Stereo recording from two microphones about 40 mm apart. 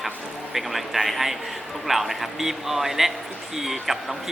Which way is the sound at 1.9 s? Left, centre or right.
Centre.